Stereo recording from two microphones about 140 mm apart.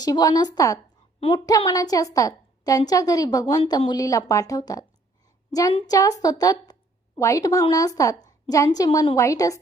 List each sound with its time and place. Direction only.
0.0 s a woman's voice: 25° left (ahead or behind)